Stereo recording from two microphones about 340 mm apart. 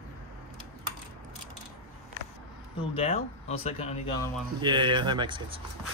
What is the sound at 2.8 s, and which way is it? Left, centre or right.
Speech, centre.